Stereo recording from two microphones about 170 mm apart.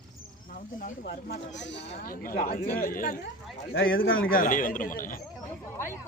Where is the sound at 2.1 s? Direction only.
55° left (ahead or behind).